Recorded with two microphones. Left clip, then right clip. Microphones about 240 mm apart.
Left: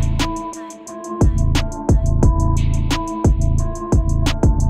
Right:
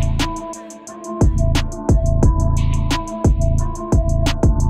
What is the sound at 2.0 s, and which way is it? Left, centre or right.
Music, right.